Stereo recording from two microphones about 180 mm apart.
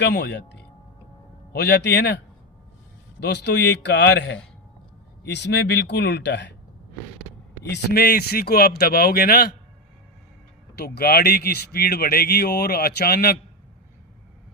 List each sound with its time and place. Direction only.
0.0 s speech: 65° left (ahead or behind)
7.6 s speech: 65° left (ahead or behind)
10.8 s speech: 60° left (ahead or behind)